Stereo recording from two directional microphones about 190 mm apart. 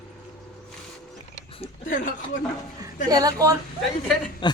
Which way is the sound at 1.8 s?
45° left (ahead or behind).